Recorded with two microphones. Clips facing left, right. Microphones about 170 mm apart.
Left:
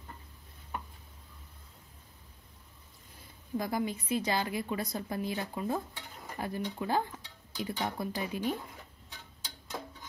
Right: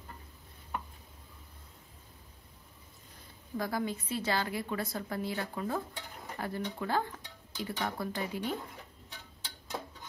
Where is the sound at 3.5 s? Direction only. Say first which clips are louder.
Left 1 dB; 15° left (ahead or behind).